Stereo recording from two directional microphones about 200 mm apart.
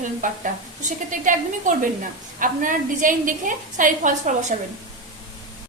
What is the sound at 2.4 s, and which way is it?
A woman's voice, 40° right (ahead or behind).